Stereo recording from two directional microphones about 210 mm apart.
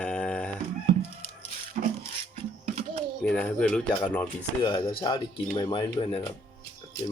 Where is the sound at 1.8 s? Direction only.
40° right (ahead or behind).